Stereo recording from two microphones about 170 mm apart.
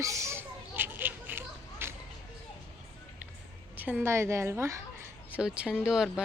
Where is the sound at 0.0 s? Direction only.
15° right (ahead or behind).